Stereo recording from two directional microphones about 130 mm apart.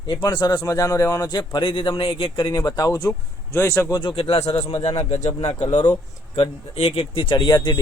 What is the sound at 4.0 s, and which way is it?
Speech, 40° left (ahead or behind).